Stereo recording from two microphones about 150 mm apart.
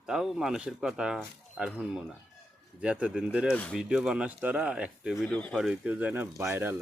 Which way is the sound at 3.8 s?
5° right (ahead or behind).